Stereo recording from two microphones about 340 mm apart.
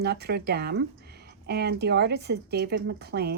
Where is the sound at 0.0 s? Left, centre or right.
Right.